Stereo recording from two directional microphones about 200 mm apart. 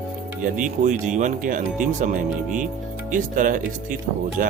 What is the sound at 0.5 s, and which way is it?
Speech, 40° right (ahead or behind).